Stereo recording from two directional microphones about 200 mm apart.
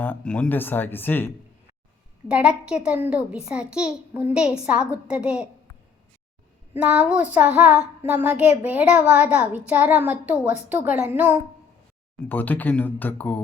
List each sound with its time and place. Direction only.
0.0 s speech: 5° left (ahead or behind)
2.2 s a child's voice: 5° right (ahead or behind)
6.7 s child singing: 5° right (ahead or behind)
12.3 s speech: 10° left (ahead or behind)